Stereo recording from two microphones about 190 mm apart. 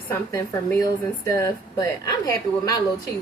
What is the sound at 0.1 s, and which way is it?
A woman's voice, 20° left (ahead or behind).